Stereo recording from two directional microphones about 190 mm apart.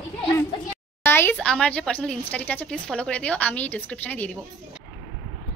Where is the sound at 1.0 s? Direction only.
10° left (ahead or behind).